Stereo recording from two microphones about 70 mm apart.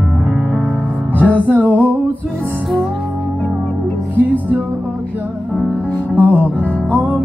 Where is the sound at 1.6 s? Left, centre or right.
Left.